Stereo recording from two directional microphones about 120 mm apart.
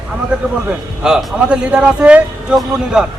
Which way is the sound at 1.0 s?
5° right (ahead or behind).